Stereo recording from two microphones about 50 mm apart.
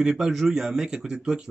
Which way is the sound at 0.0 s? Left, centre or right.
Centre.